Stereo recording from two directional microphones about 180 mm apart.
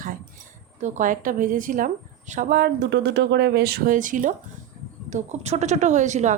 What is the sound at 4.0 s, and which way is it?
A woman's voice, 45° right (ahead or behind).